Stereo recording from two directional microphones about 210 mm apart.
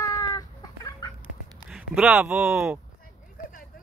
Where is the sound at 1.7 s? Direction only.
Centre (ahead or behind).